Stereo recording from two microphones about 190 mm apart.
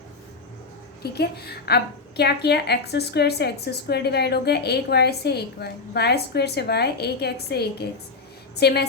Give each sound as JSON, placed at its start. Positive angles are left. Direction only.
{"t": 1.0, "sound": "a woman's voice", "side_deg": 55}